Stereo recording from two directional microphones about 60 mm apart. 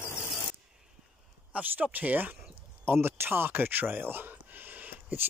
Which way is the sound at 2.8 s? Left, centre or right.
Right.